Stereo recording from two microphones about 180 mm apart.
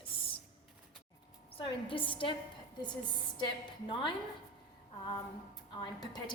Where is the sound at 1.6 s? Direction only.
30° left (ahead or behind).